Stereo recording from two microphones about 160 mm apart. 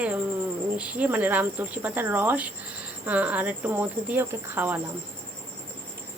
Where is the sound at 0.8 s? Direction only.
10° right (ahead or behind).